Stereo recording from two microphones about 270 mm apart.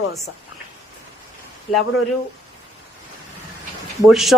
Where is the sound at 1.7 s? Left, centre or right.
Left.